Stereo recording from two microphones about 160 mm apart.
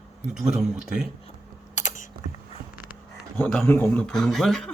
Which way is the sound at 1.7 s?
50° left (ahead or behind).